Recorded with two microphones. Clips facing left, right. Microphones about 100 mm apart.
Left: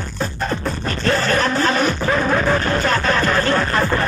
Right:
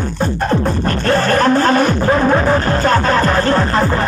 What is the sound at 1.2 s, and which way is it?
Music, 45° right (ahead or behind).